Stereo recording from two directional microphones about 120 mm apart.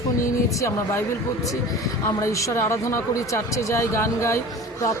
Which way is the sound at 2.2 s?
25° left (ahead or behind).